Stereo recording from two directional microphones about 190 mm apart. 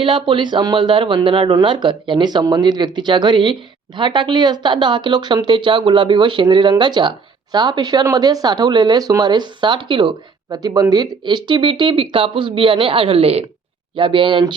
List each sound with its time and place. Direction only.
0.0 s speech: 25° right (ahead or behind)